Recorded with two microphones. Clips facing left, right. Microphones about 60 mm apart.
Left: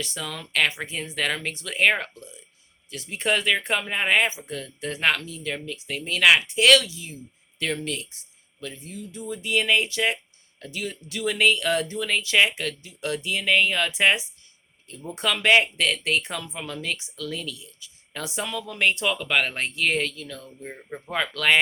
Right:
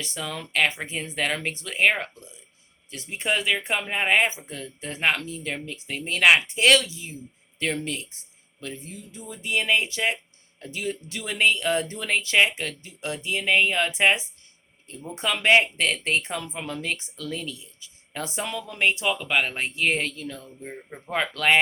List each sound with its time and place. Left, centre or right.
0.0 s speech: right
19.7 s speech: right